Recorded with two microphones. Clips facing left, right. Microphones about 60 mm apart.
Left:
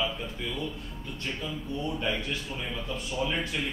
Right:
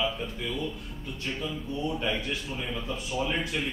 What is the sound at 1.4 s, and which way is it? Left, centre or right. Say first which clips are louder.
A man's voice: right 2 dB; centre.